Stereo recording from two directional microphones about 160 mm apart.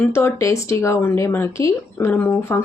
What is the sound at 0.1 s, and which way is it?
Speech, 15° left (ahead or behind).